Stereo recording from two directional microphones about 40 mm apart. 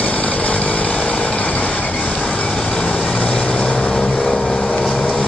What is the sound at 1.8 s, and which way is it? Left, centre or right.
Train, left.